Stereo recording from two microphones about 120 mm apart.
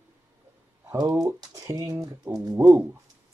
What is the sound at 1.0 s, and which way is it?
Speech, 30° right (ahead or behind).